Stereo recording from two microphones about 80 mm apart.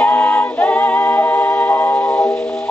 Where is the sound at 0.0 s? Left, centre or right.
Left.